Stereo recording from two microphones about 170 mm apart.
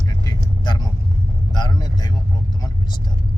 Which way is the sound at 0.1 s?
25° left (ahead or behind).